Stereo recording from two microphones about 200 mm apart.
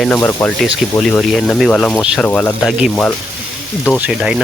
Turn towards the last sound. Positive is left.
turn(degrees=-5)  # may be behind; listen again after turning